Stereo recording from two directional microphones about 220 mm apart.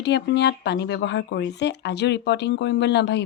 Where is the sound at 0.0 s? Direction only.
50° left (ahead or behind).